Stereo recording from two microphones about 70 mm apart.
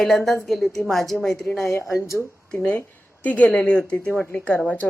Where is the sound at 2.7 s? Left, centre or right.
Left.